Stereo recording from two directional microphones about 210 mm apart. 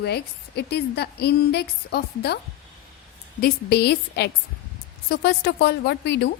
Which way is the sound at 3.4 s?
50° left (ahead or behind).